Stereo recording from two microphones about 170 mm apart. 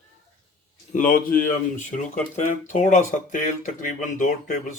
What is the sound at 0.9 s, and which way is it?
Speech, 50° left (ahead or behind).